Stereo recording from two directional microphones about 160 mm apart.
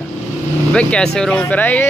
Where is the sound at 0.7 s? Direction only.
5° left (ahead or behind).